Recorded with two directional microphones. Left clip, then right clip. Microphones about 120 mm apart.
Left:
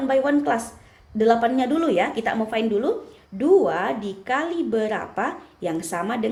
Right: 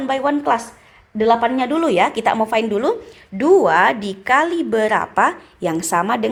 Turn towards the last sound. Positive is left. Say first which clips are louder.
# right 8 dB
turn(degrees=-45)  # may be behind; listen again after turning